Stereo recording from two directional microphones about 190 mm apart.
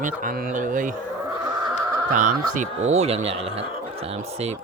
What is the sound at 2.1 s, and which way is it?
Speech, 45° right (ahead or behind).